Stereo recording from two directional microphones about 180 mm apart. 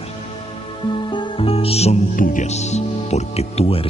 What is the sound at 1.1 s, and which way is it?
Music, 30° left (ahead or behind).